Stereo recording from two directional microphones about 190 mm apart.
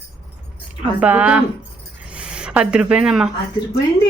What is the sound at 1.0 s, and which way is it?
Speech, 5° right (ahead or behind).